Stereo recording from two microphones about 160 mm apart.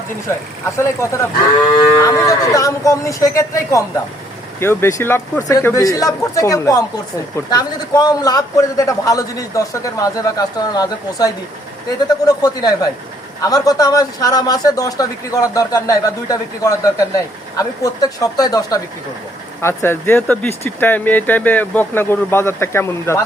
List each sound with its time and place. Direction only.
0.8 s a man's voice: 15° left (ahead or behind)